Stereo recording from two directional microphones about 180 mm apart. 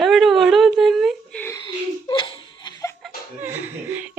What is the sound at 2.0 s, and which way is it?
Laughter, 30° left (ahead or behind).